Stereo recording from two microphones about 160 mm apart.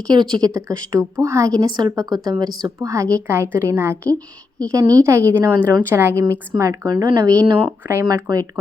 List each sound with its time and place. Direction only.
0.1 s a woman's voice: 25° right (ahead or behind)